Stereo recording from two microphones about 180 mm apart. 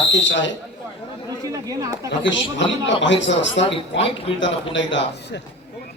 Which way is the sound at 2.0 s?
90° left.